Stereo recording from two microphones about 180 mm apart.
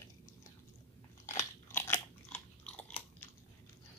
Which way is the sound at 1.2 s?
15° left (ahead or behind).